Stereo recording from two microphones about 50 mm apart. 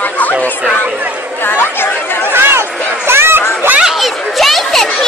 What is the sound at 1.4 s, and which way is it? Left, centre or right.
Chatter, left.